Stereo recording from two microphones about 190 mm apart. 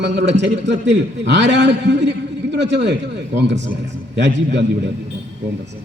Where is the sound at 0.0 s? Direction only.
70° right (ahead or behind).